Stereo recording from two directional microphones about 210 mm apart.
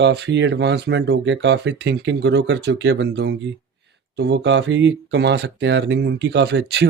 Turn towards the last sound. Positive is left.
turn(degrees=-55)  # may be behind; listen again after turning